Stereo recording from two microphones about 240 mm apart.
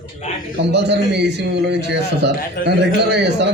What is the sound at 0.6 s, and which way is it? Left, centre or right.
A man's voice, right.